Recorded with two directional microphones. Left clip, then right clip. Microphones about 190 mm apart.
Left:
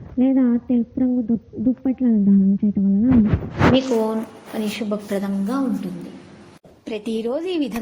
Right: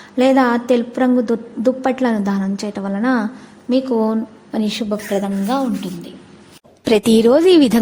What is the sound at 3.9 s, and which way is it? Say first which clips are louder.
Speech: right 2 dB; 15° right (ahead or behind).